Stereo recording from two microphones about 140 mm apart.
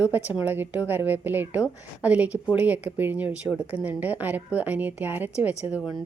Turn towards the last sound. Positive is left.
turn(degrees=-10)  # may be behind; listen again after turning